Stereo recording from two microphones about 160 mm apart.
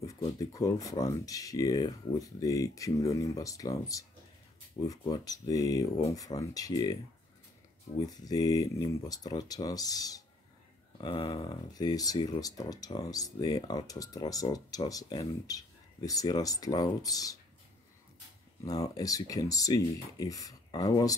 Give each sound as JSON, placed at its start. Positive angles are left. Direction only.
{"t": 0.0, "sound": "speech", "side_deg": 20}
{"t": 8.0, "sound": "speech", "side_deg": 25}
{"t": 18.7, "sound": "speech", "side_deg": 20}